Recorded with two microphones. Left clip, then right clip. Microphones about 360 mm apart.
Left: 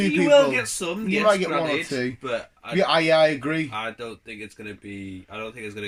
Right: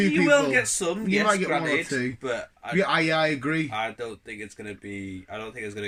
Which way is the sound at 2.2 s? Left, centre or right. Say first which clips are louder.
Left 1 dB; centre.